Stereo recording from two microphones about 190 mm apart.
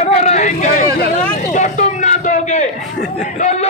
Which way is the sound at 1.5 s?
40° left (ahead or behind).